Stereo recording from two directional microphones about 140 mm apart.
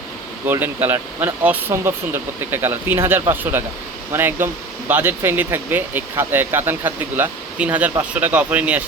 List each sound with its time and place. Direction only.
0.4 s speech: 15° right (ahead or behind)